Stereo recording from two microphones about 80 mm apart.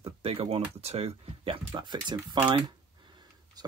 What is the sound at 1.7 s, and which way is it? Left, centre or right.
Speech, right.